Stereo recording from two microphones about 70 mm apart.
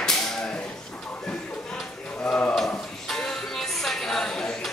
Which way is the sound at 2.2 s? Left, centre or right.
Centre.